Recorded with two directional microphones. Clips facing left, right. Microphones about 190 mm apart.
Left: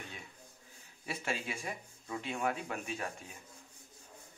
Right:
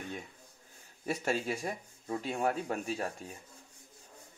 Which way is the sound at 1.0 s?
40° right (ahead or behind).